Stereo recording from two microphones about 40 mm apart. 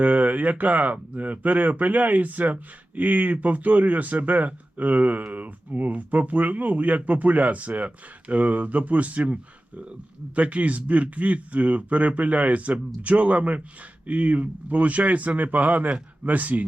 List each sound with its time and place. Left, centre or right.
0.0 s speech: right